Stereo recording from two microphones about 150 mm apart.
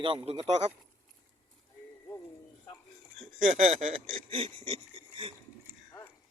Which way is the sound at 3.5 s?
45° right (ahead or behind).